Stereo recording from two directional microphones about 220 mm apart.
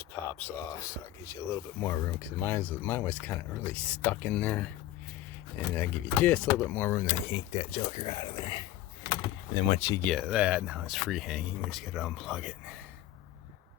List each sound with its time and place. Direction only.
0.1 s speech: 5° left (ahead or behind)
5.7 s speech: 5° left (ahead or behind)
10.0 s speech: centre (ahead or behind)